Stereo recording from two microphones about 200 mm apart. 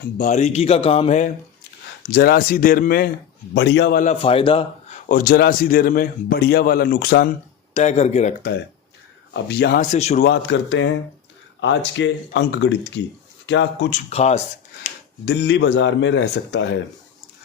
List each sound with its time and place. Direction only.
0.2 s a man's voice: 35° left (ahead or behind)
2.0 s a man's voice: 50° left (ahead or behind)
3.5 s speech: 60° left (ahead or behind)
4.0 s a man's voice: 30° left (ahead or behind)
5.0 s a man's voice: 45° left (ahead or behind)
7.7 s a man's voice: 35° left (ahead or behind)
9.3 s a man's voice: 55° left (ahead or behind)
9.9 s a man's voice: 35° left (ahead or behind)
10.2 s speech: 60° left (ahead or behind)
11.9 s speech: 65° left (ahead or behind)
13.9 s a man's voice: 35° left (ahead or behind)
14.8 s speech: 50° left (ahead or behind)